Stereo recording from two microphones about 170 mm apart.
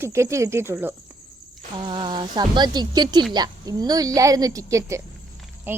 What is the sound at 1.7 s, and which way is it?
A woman's voice, 30° right (ahead or behind).